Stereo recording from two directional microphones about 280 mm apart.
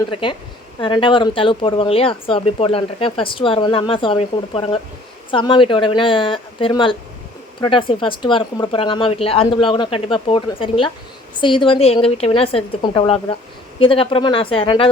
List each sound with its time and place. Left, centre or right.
0.1 s speech: centre